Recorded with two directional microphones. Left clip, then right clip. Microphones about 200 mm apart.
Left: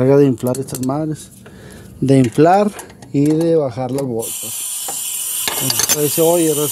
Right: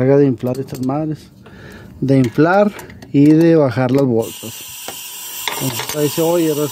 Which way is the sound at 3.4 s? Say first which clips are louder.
Right 3 dB; 25° right (ahead or behind).